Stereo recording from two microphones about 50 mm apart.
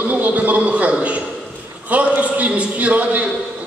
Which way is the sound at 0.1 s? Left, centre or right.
Right.